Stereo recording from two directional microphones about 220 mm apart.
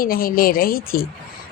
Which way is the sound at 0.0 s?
40° left (ahead or behind).